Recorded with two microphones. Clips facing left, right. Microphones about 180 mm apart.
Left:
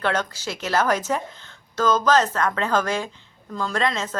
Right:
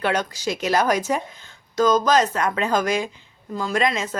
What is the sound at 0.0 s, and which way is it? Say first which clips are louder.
A woman's voice: right 2 dB; 15° right (ahead or behind).